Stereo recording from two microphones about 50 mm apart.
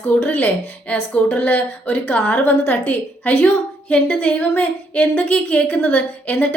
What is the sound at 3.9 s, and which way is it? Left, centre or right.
Speech, left.